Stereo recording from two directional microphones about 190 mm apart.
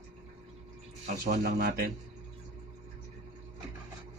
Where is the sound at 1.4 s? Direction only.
55° right (ahead or behind).